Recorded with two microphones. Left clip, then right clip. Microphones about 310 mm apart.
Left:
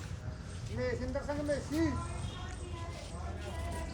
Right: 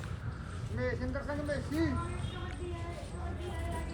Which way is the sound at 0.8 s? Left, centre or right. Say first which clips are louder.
Even; left.